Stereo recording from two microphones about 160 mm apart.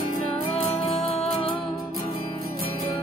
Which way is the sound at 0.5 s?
35° left (ahead or behind).